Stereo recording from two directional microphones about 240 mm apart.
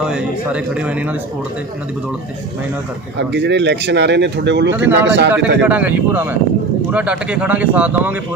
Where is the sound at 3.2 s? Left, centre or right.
Right.